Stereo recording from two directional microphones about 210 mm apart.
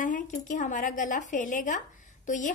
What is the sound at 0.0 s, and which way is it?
A woman's voice, 40° left (ahead or behind).